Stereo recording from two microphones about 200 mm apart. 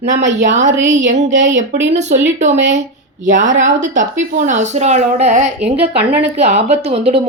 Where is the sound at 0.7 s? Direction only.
65° right (ahead or behind).